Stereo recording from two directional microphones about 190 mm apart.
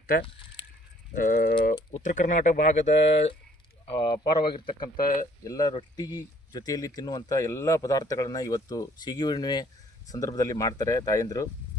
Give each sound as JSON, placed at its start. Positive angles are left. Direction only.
{"t": 0.1, "sound": "mechanisms", "side_deg": 45}
{"t": 1.9, "sound": "speech", "side_deg": 40}
{"t": 3.9, "sound": "speech", "side_deg": 25}
{"t": 4.9, "sound": "mechanisms", "side_deg": 45}
{"t": 5.4, "sound": "speech", "side_deg": 20}